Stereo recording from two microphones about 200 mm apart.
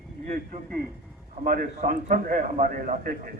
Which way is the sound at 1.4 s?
45° right (ahead or behind).